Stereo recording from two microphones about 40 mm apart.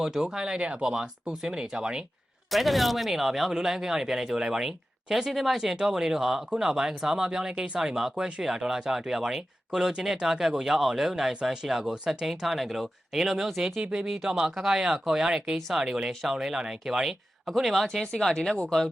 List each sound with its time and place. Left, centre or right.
0.0 s speech: centre
2.5 s speech: centre
5.7 s speech: centre
13.7 s speech: right
14.3 s speech: centre
17.4 s speech: centre
17.8 s speech: centre